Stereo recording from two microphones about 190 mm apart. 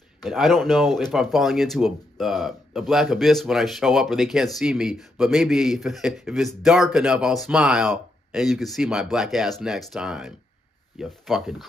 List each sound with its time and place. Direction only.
0.2 s speech: centre (ahead or behind)